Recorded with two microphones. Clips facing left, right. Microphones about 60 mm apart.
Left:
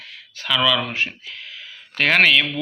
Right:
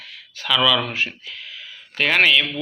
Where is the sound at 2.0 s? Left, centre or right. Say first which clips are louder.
Left 1 dB; left.